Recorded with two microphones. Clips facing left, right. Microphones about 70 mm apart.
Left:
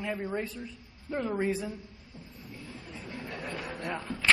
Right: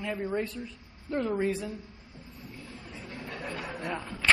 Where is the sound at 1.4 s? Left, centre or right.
Left.